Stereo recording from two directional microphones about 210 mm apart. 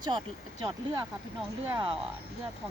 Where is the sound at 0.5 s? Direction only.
15° right (ahead or behind).